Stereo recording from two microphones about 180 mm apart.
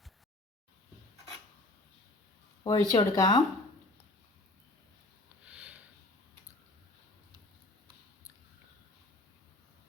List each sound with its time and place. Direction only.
2.6 s speech: 25° left (ahead or behind)
5.5 s sniff: 5° right (ahead or behind)